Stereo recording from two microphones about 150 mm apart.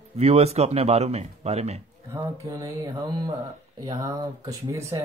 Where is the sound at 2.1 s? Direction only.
25° right (ahead or behind).